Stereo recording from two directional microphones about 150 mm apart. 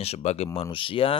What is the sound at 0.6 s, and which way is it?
Speech, 35° left (ahead or behind).